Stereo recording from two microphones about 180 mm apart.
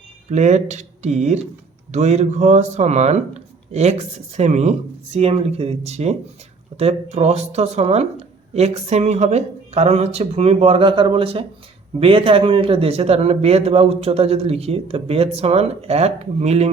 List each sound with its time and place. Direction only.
0.3 s speech: 40° right (ahead or behind)